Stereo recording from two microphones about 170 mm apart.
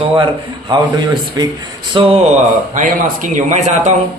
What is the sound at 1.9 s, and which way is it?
Speech, 30° right (ahead or behind).